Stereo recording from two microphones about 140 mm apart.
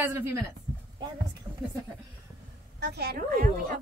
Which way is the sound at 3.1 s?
90° right.